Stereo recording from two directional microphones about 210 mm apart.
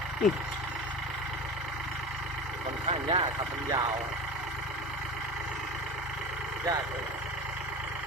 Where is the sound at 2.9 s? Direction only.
25° right (ahead or behind).